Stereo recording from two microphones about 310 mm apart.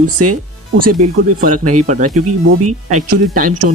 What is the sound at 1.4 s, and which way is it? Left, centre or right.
Speech, right.